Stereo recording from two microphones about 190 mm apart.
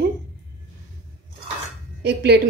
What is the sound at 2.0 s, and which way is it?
Speech, 60° right (ahead or behind).